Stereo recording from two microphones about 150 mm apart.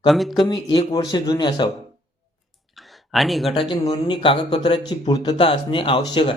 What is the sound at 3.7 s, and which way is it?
Speech, 30° left (ahead or behind).